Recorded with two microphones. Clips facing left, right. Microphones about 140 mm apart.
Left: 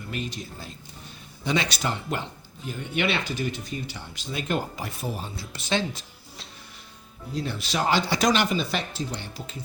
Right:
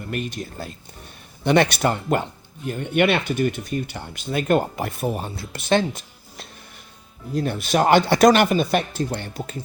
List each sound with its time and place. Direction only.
0.1 s speech: 55° right (ahead or behind)